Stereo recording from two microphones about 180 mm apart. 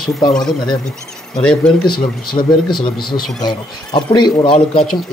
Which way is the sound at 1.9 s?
25° left (ahead or behind).